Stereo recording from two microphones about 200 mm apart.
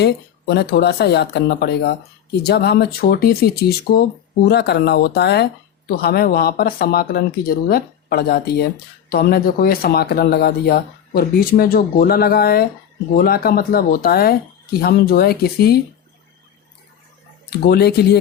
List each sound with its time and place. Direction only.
0.0 s speech: 55° left (ahead or behind)
17.4 s speech: 50° left (ahead or behind)